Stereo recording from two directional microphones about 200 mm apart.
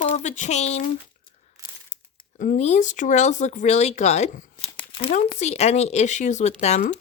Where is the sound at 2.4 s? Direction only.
40° left (ahead or behind).